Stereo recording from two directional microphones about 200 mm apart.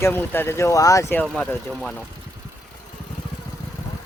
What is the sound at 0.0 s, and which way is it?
Speech, 10° left (ahead or behind).